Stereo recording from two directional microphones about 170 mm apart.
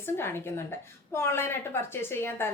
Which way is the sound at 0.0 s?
15° left (ahead or behind).